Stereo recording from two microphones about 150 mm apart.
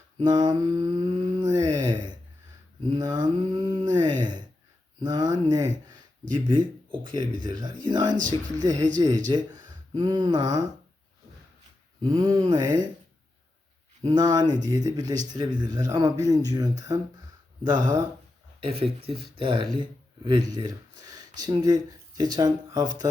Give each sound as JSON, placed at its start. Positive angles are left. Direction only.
{"t": 0.2, "sound": "mantra", "side_deg": -25}
{"t": 2.8, "sound": "speech", "side_deg": -30}
{"t": 12.0, "sound": "speech", "side_deg": -25}
{"t": 14.0, "sound": "speech", "side_deg": -25}
{"t": 19.4, "sound": "speech", "side_deg": -35}